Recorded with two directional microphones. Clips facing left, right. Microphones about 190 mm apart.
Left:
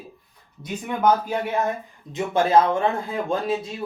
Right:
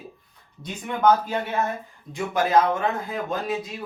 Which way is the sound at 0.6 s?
10° left (ahead or behind).